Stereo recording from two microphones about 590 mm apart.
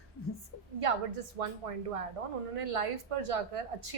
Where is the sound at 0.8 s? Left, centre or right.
Right.